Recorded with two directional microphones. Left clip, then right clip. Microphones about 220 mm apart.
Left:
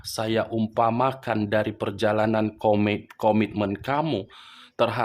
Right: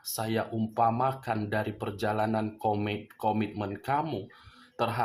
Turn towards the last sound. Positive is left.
turn(degrees=40)  # may be behind; listen again after turning